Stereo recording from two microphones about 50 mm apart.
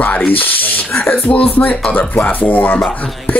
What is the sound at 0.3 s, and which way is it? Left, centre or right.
Speech, left.